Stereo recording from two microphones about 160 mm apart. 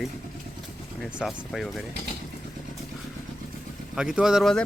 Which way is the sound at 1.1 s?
Centre (ahead or behind).